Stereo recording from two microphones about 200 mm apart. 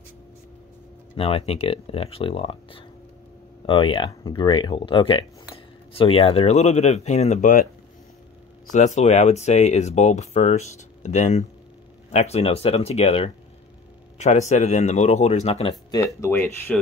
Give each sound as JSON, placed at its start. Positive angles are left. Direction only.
{"t": 1.1, "sound": "speech", "side_deg": 30}
{"t": 8.7, "sound": "speech", "side_deg": 35}
{"t": 15.9, "sound": "speech", "side_deg": 10}